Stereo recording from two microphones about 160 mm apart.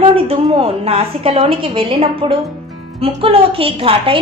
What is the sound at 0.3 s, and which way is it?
A woman's voice, 35° right (ahead or behind).